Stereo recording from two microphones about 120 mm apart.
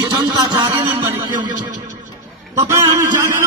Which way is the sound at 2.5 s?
25° right (ahead or behind).